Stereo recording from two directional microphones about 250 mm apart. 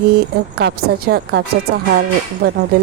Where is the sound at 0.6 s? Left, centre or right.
Right.